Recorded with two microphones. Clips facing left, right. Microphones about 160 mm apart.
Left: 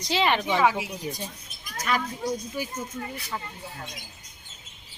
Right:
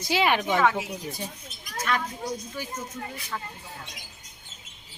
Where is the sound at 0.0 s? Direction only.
5° right (ahead or behind).